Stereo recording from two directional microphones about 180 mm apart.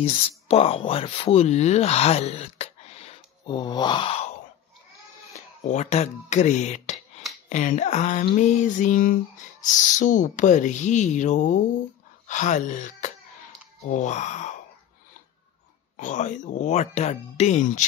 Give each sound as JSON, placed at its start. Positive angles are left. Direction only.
{"t": 0.0, "sound": "speech", "side_deg": 35}
{"t": 5.3, "sound": "speech", "side_deg": 40}
{"t": 7.4, "sound": "a sound", "side_deg": 45}
{"t": 13.8, "sound": "speech", "side_deg": 40}
{"t": 16.0, "sound": "speech", "side_deg": 45}